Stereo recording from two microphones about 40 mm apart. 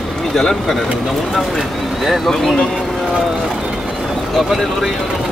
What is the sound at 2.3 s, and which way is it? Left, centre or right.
Speech, centre.